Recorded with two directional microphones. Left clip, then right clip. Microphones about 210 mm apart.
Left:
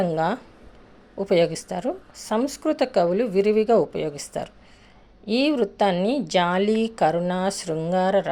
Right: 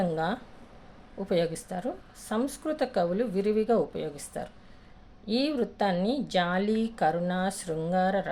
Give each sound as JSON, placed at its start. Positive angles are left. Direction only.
{"t": 0.0, "sound": "speech", "side_deg": 30}